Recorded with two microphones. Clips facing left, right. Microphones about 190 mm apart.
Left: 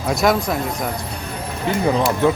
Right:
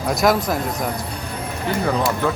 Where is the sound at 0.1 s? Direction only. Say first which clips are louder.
Even; centre (ahead or behind).